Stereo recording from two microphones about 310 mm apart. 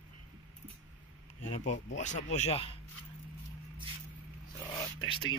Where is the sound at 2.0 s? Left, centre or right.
Left.